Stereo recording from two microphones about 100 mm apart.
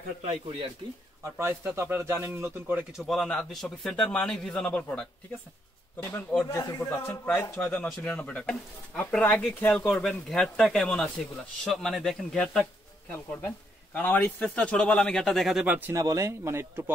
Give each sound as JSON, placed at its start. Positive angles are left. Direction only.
{"t": 0.2, "sound": "a man's voice", "side_deg": -70}
{"t": 1.2, "sound": "speech", "side_deg": -25}
{"t": 2.9, "sound": "a man's voice", "side_deg": 0}
{"t": 7.7, "sound": "a man's voice", "side_deg": 10}
{"t": 13.9, "sound": "speech", "side_deg": 15}
{"t": 15.6, "sound": "speech", "side_deg": -15}
{"t": 15.9, "sound": "speech", "side_deg": -30}